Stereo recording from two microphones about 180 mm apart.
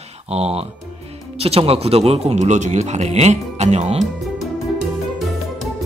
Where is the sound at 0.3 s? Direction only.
35° right (ahead or behind).